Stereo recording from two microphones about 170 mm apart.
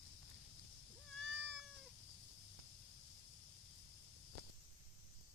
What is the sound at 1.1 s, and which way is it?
Cat, 5° left (ahead or behind).